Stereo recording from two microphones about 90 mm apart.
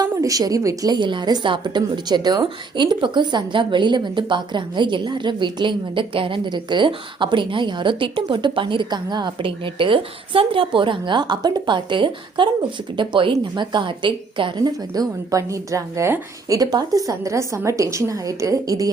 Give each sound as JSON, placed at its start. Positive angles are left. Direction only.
{"t": 0.2, "sound": "a woman's voice", "side_deg": -40}
{"t": 0.9, "sound": "a woman's voice", "side_deg": -60}
{"t": 9.4, "sound": "a woman's voice", "side_deg": -70}
{"t": 14.6, "sound": "a woman's voice", "side_deg": -40}
{"t": 16.5, "sound": "a woman's voice", "side_deg": -45}